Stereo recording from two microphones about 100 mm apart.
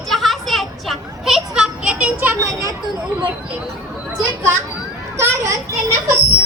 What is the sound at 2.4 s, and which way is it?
Speech, 30° right (ahead or behind).